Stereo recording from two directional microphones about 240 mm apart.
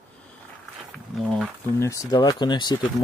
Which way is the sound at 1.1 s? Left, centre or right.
Centre.